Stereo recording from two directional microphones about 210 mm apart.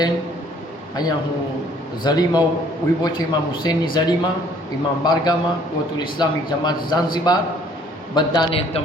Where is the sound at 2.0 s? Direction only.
20° left (ahead or behind).